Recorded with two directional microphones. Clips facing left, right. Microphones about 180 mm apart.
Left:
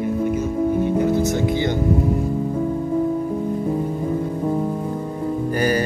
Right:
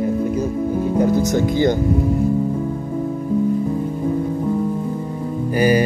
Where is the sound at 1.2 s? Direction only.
40° right (ahead or behind).